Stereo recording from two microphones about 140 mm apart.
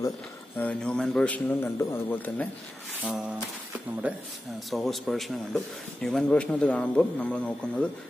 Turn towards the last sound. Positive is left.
turn(degrees=10)  # may be behind; listen again after turning